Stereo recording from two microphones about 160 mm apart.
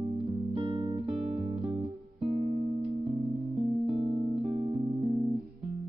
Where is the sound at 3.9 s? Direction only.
30° right (ahead or behind).